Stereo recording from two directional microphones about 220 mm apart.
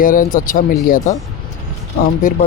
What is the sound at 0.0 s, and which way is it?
Speech, 40° left (ahead or behind).